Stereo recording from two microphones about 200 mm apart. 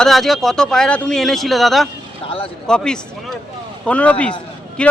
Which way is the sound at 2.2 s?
25° left (ahead or behind).